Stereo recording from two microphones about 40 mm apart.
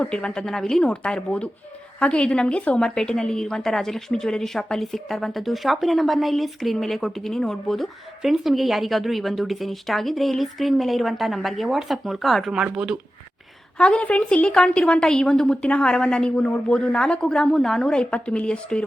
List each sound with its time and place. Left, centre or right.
0.0 s a woman's voice: left
0.4 s a woman's voice: centre
0.8 s a woman's voice: left; by 7.9 s centre
8.2 s a woman's voice: centre
12.7 s speech: centre
13.7 s a woman's voice: left
14.0 s a woman's voice: left